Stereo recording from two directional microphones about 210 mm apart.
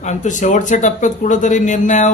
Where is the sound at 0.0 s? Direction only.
35° left (ahead or behind).